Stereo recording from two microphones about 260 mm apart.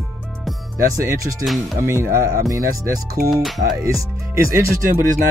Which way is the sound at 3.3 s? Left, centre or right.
Centre.